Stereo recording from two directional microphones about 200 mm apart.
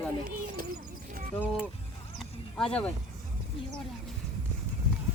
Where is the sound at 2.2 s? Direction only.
5° left (ahead or behind).